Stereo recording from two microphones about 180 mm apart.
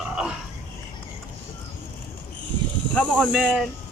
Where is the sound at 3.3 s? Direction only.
5° right (ahead or behind).